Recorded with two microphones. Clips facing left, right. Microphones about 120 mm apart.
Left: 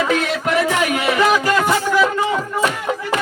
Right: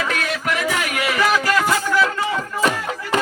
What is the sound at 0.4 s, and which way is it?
Music, 25° left (ahead or behind).